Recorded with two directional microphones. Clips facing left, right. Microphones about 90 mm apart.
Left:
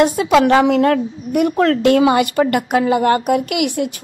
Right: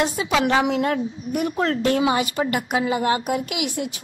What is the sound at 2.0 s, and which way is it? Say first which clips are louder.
A woman's voice: left 7 dB; 60° left (ahead or behind).